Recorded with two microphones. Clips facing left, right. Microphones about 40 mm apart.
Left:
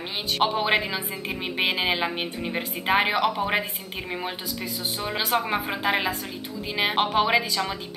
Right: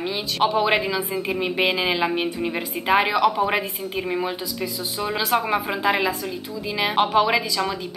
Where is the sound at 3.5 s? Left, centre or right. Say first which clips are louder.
Right 3 dB; centre.